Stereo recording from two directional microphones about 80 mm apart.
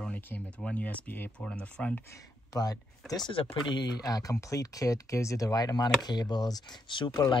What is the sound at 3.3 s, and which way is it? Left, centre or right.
Speech, left.